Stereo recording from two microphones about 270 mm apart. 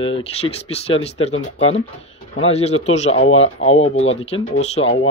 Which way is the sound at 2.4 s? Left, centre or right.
Left.